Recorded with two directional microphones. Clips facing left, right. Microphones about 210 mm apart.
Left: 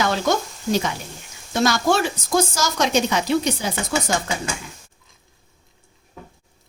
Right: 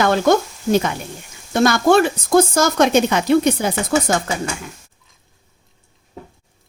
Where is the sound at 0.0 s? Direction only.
55° right (ahead or behind).